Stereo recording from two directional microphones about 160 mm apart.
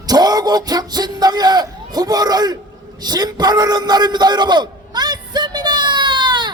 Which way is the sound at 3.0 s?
25° right (ahead or behind).